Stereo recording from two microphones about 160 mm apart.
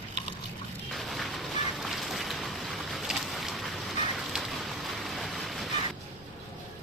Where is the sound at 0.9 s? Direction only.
Centre (ahead or behind).